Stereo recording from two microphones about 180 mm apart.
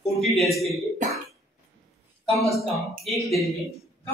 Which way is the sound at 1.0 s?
45° right (ahead or behind).